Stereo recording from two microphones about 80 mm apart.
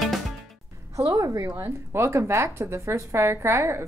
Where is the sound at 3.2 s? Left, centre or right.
Right.